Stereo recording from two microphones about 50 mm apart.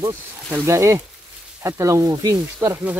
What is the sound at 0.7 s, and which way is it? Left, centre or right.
Speech, right.